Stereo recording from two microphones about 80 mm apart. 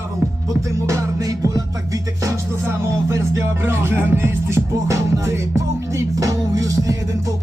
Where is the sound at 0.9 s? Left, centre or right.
Right.